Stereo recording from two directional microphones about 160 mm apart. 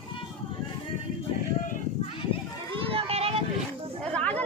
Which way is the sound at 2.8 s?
35° right (ahead or behind).